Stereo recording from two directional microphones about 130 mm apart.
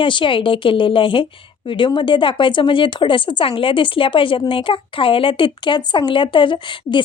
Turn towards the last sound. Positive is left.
turn(degrees=40)  # may be behind; listen again after turning